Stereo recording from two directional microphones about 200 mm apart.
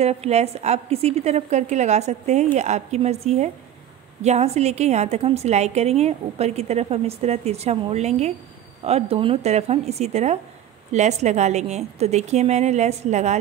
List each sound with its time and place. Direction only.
0.0 s a woman's voice: 30° right (ahead or behind)